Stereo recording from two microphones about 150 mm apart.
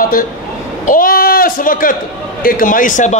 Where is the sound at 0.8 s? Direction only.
65° left (ahead or behind).